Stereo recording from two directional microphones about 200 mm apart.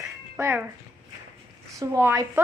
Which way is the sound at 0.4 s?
5° right (ahead or behind).